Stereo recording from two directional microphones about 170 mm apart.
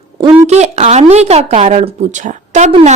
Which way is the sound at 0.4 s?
40° right (ahead or behind).